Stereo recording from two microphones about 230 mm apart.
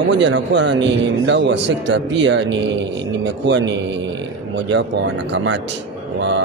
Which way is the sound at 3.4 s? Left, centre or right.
Right.